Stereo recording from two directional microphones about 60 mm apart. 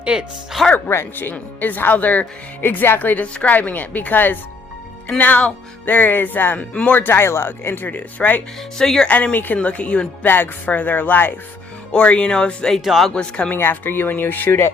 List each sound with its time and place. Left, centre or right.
0.0 s speech: centre
0.5 s speech: centre
0.9 s speech: left
8.8 s speech: centre
9.0 s speech: left
10.2 s speech: left
11.9 s speech: centre
12.8 s speech: centre
13.1 s speech: centre
13.5 s speech: left